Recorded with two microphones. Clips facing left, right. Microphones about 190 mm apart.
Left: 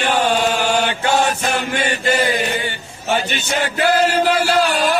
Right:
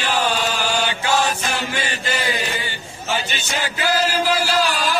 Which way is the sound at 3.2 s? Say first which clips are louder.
Left 5 dB; 60° left (ahead or behind).